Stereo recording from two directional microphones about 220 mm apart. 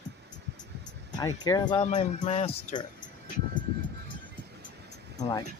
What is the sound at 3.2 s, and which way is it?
Vehicle, 35° left (ahead or behind).